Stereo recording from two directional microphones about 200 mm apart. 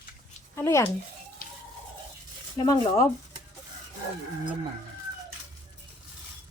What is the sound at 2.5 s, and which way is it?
Speech, 20° left (ahead or behind).